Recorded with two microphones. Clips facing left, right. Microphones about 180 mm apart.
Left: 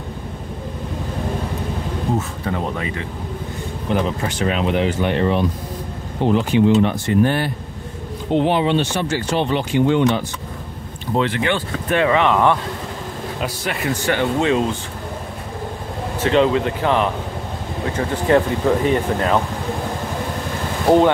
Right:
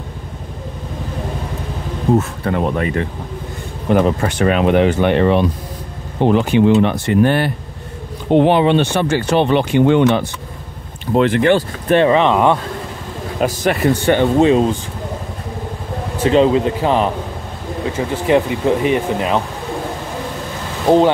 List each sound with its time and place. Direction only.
2.1 s speech: 60° right (ahead or behind)
11.1 s speech: 45° right (ahead or behind); by 12.5 s 20° right (ahead or behind)
13.4 s a man's voice: 45° right (ahead or behind)
14.0 s speech: 30° right (ahead or behind)
16.3 s speech: 25° right (ahead or behind)
17.9 s speech: 15° right (ahead or behind)
20.9 s speech: 5° left (ahead or behind)